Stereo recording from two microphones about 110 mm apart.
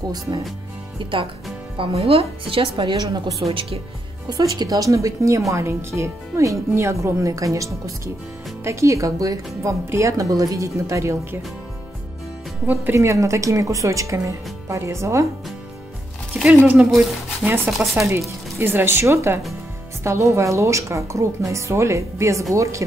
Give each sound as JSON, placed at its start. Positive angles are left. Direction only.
{"t": 1.8, "sound": "a woman's voice", "side_deg": -60}
{"t": 3.4, "sound": "speech", "side_deg": -60}
{"t": 4.3, "sound": "a woman's voice", "side_deg": -35}
{"t": 12.6, "sound": "a woman's voice", "side_deg": -20}
{"t": 16.4, "sound": "speech", "side_deg": -15}
{"t": 17.4, "sound": "a woman's voice", "side_deg": -5}